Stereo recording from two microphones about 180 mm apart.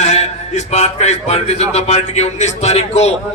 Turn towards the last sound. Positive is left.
turn(degrees=35)  # may be behind; listen again after turning